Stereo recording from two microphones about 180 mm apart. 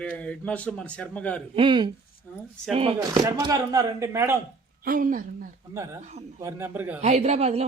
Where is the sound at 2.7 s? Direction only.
30° right (ahead or behind).